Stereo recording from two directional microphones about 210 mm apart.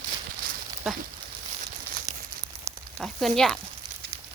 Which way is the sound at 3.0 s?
Centre (ahead or behind).